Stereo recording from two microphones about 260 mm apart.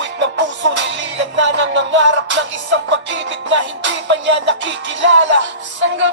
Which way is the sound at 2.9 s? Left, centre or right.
Right.